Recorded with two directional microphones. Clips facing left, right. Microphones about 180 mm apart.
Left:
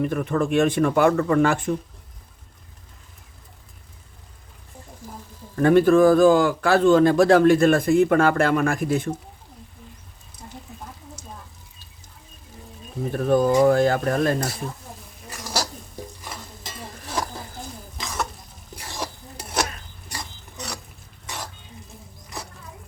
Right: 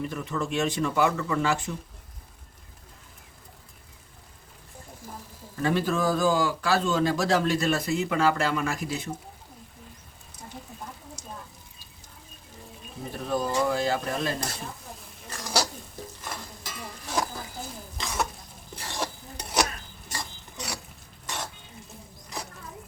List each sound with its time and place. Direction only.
0.0 s a man's voice: 55° left (ahead or behind)
5.5 s a man's voice: 55° left (ahead or behind)
13.1 s a man's voice: 55° left (ahead or behind)
15.3 s a sound: 5° left (ahead or behind)
18.0 s stir: centre (ahead or behind)
20.1 s a sound: 5° left (ahead or behind)
21.2 s stir: centre (ahead or behind)